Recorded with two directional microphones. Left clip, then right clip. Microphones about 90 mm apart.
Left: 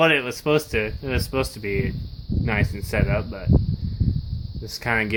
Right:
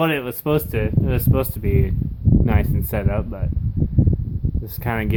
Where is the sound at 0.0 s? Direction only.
35° right (ahead or behind).